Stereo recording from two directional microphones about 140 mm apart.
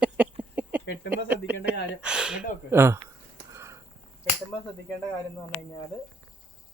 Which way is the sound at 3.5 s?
20° right (ahead or behind).